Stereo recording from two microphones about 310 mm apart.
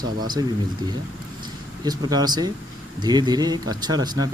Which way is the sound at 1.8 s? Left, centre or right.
Centre.